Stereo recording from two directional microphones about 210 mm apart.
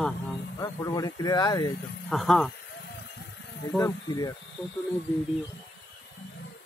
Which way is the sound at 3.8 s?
20° left (ahead or behind).